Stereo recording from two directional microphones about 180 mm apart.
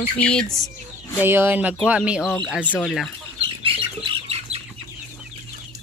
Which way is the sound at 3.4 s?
30° right (ahead or behind).